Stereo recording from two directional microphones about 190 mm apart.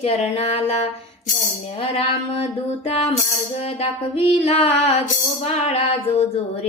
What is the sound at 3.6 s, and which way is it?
Music, 30° left (ahead or behind).